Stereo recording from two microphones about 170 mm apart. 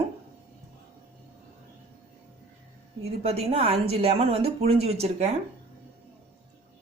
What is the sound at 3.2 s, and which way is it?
A woman's voice, 35° right (ahead or behind).